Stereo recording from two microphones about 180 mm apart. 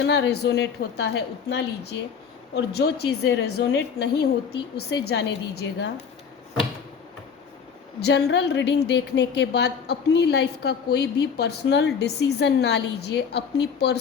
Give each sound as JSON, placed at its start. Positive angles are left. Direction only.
{"t": 0.0, "sound": "a woman's voice", "side_deg": 70}
{"t": 8.0, "sound": "a woman's voice", "side_deg": 70}